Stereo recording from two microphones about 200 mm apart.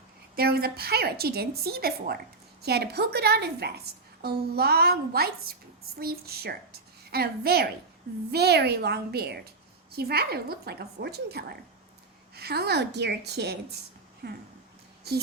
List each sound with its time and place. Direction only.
0.3 s a woman's voice: 50° right (ahead or behind)